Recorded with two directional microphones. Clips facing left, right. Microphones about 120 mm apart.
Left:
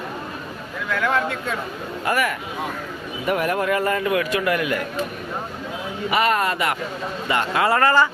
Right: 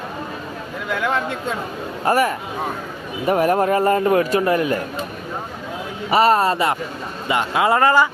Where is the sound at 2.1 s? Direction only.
35° right (ahead or behind).